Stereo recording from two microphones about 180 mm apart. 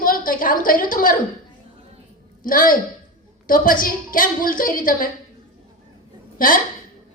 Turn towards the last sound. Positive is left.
turn(degrees=50)  # may be behind; listen again after turning